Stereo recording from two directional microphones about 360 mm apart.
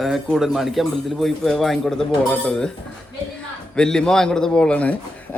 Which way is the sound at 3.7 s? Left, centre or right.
Centre.